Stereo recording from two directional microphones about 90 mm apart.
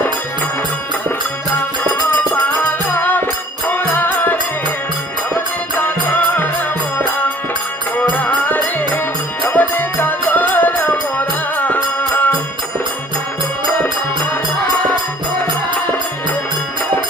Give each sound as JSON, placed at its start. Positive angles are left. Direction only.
{"t": 1.8, "sound": "music", "side_deg": 15}
{"t": 7.9, "sound": "music", "side_deg": 15}